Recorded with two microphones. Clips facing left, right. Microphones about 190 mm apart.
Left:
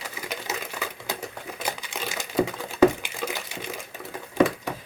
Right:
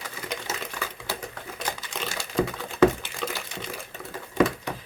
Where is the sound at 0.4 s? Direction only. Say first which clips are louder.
Left 1 dB; 15° left (ahead or behind).